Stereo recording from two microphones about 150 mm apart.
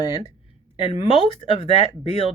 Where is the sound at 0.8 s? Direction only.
40° left (ahead or behind).